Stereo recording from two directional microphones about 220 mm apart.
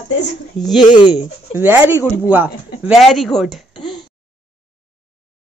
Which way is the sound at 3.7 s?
20° left (ahead or behind).